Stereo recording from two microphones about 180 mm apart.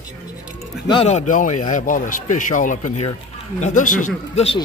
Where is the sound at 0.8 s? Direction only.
35° left (ahead or behind).